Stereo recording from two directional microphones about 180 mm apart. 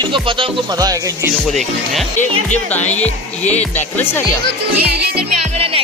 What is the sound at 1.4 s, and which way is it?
Speech, centre (ahead or behind).